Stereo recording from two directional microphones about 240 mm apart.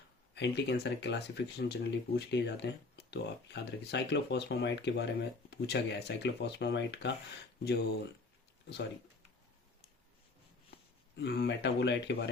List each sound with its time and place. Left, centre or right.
0.3 s speech: left
11.2 s speech: left